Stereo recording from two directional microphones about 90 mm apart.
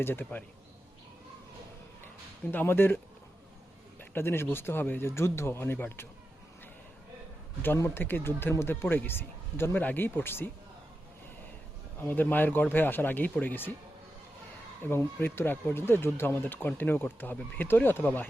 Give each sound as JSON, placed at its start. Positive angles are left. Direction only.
{"t": 0.0, "sound": "speech", "side_deg": 25}
{"t": 2.5, "sound": "speech", "side_deg": 25}
{"t": 4.1, "sound": "speech", "side_deg": 25}
{"t": 7.8, "sound": "speech", "side_deg": 30}
{"t": 12.0, "sound": "speech", "side_deg": 20}
{"t": 14.8, "sound": "speech", "side_deg": 25}